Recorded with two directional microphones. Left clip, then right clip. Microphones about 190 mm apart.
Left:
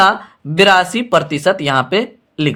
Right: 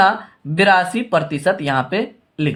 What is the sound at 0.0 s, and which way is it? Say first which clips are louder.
Speech: left 3 dB; 40° left (ahead or behind).